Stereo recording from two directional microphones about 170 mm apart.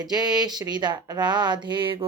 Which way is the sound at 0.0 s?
25° right (ahead or behind).